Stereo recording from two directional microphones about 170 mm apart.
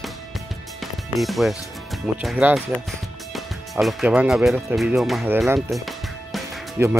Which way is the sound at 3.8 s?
Centre (ahead or behind).